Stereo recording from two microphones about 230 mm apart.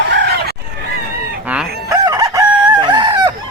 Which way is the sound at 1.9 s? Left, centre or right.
Centre.